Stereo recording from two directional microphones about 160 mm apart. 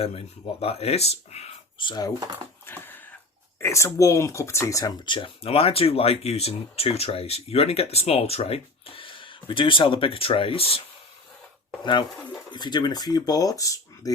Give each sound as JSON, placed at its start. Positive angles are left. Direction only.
{"t": 0.0, "sound": "speech", "side_deg": 40}
{"t": 1.9, "sound": "speech", "side_deg": 25}
{"t": 2.6, "sound": "a sound", "side_deg": 10}
{"t": 3.6, "sound": "speech", "side_deg": 15}